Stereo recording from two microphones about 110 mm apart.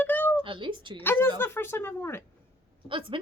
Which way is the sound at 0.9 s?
20° left (ahead or behind).